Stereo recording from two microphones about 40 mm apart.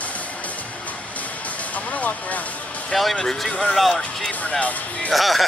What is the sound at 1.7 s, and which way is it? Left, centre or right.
Vehicle, left.